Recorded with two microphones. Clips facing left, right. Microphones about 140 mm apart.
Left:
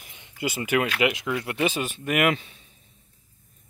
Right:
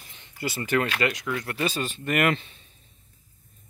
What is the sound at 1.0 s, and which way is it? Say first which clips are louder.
Speech: left 3 dB; 20° left (ahead or behind).